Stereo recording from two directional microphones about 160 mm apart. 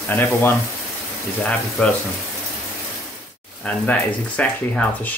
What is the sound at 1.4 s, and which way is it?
Speech, 5° left (ahead or behind).